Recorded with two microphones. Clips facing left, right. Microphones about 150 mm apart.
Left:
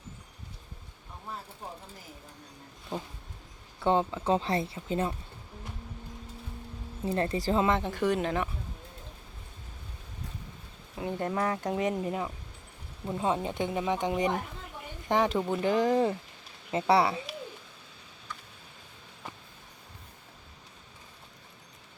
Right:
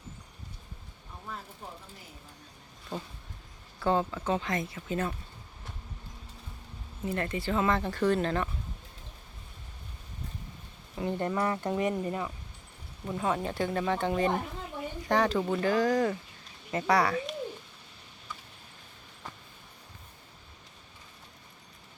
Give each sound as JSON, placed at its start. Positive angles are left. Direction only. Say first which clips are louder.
{"t": 2.9, "sound": "speech", "louder": "left 2 dB", "side_deg": 15}
{"t": 7.0, "sound": "speech", "louder": "left 3 dB", "side_deg": 35}
{"t": 7.6, "sound": "speech", "louder": "right 3 dB", "side_deg": 20}
{"t": 10.9, "sound": "speech", "louder": "right 1 dB", "side_deg": 5}
{"t": 12.0, "sound": "speech", "louder": "left 1 dB", "side_deg": 15}